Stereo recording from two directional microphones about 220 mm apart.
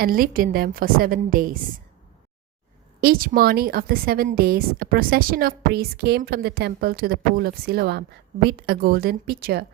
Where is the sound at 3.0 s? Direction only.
40° right (ahead or behind).